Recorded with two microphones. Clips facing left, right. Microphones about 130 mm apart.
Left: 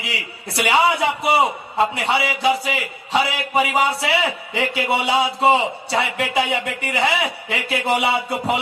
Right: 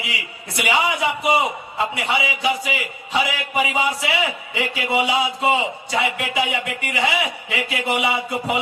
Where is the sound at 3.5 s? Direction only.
35° left (ahead or behind).